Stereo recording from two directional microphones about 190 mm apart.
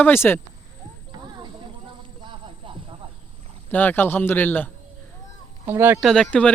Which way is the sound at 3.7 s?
10° left (ahead or behind).